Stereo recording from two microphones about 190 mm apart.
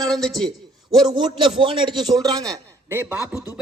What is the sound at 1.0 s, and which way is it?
A man's voice, 25° right (ahead or behind).